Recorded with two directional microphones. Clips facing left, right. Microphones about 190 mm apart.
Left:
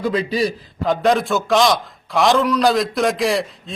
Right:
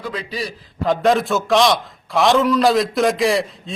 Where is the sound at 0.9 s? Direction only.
Centre (ahead or behind).